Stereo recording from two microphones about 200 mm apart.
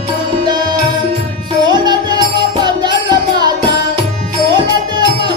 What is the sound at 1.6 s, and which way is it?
Music, 20° right (ahead or behind).